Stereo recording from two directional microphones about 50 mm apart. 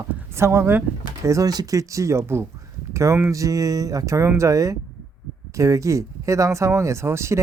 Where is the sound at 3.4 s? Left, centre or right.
Right.